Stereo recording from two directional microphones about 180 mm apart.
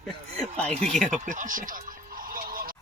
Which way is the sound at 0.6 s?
40° right (ahead or behind).